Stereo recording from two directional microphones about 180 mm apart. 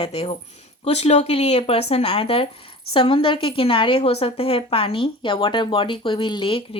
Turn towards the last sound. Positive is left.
turn(degrees=30)  # may be behind; listen again after turning